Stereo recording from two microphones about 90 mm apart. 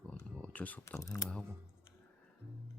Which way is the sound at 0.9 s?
35° left (ahead or behind).